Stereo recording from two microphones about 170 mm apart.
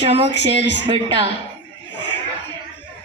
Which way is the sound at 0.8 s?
30° right (ahead or behind).